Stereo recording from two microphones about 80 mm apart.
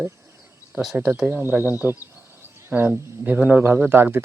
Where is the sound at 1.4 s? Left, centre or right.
Left.